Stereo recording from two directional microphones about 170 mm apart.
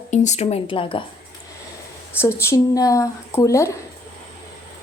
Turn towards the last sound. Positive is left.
turn(degrees=20)  # may be behind; listen again after turning